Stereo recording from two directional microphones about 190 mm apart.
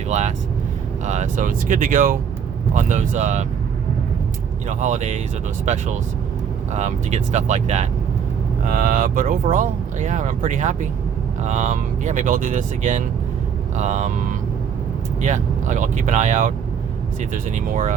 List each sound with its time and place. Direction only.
0.1 s speech: 40° right (ahead or behind)
4.7 s speech: 40° right (ahead or behind)
17.5 s speech: 40° right (ahead or behind)